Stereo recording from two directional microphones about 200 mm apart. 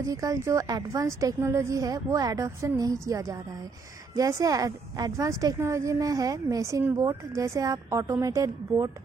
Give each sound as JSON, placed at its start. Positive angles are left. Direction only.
{"t": 0.1, "sound": "a woman's voice", "side_deg": -15}